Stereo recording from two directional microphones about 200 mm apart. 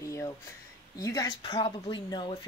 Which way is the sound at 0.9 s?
15° left (ahead or behind).